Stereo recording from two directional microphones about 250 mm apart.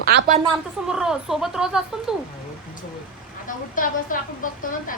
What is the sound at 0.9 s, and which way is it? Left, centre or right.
A woman's voice, centre.